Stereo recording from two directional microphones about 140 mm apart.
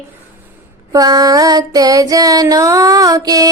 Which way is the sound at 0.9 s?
25° right (ahead or behind).